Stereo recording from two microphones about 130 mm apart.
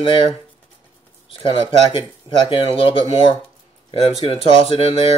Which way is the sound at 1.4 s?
40° left (ahead or behind).